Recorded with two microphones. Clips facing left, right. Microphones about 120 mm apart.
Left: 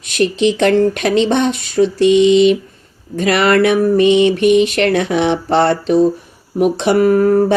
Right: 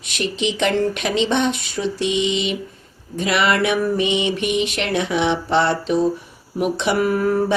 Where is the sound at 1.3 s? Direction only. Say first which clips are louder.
Left 4 dB; 40° left (ahead or behind).